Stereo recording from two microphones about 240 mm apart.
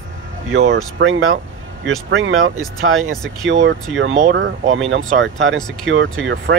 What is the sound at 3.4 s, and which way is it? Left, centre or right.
Speech, right.